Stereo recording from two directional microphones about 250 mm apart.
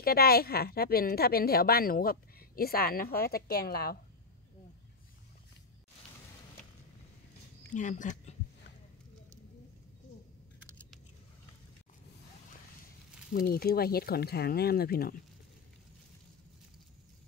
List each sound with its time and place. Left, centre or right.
0.0 s speech: left
7.7 s speech: left
13.3 s speech: left